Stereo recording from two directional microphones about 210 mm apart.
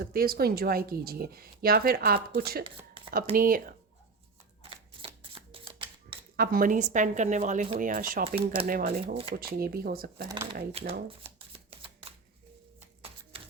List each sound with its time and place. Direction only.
0.0 s speech: 45° right (ahead or behind)
2.6 s a sound: 25° right (ahead or behind)
3.3 s speech: 45° right (ahead or behind)
4.6 s camera: 25° right (ahead or behind)
6.3 s speech: 45° right (ahead or behind)
10.2 s speech: 15° right (ahead or behind)
10.7 s speech: 25° right (ahead or behind)
11.3 s typewriter: 25° right (ahead or behind)